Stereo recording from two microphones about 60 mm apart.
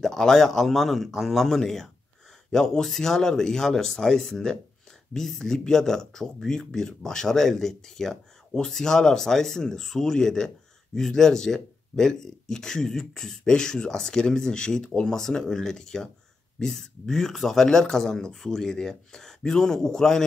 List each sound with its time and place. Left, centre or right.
0.0 s a man's voice: centre